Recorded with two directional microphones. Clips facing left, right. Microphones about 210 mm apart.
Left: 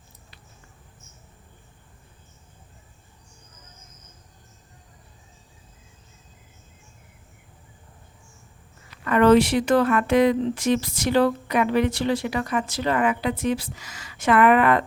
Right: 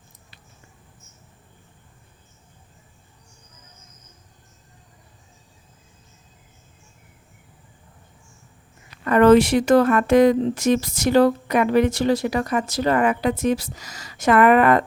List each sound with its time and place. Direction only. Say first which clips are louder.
9.0 s speech: right 3 dB; 45° right (ahead or behind)